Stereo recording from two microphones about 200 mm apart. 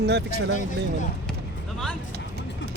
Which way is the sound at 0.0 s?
55° right (ahead or behind).